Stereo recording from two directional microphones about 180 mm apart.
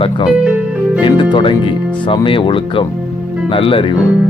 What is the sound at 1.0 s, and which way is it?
Speech, 25° left (ahead or behind).